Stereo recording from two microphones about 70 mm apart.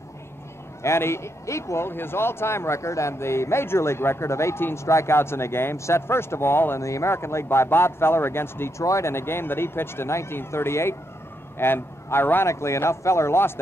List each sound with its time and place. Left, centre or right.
0.8 s speech: left
6.8 s speech: left